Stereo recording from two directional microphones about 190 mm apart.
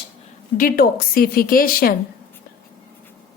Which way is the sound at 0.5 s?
50° left (ahead or behind).